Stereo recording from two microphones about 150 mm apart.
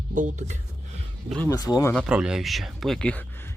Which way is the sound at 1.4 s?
25° left (ahead or behind).